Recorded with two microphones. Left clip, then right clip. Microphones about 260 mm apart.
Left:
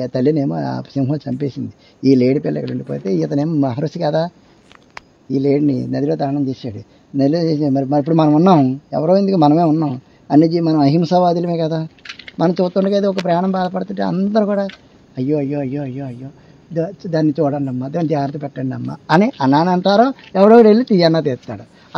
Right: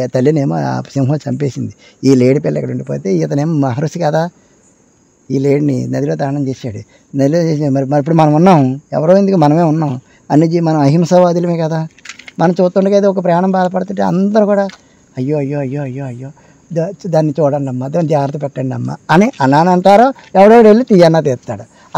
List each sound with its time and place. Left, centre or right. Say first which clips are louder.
0.0 s a man's voice: right 4 dB; right
5.3 s a man's voice: right 3 dB; right
12.4 s a man's voice: right 5 dB; right